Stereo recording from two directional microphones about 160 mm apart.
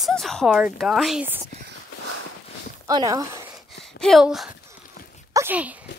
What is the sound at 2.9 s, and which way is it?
Speech, 25° right (ahead or behind).